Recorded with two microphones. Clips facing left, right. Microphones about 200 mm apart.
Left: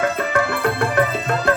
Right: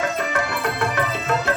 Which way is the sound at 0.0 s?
55° left (ahead or behind).